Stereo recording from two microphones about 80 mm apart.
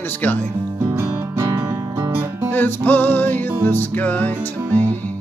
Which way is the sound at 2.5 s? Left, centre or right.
Left.